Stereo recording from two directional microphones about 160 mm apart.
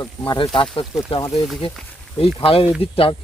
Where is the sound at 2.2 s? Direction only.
35° left (ahead or behind).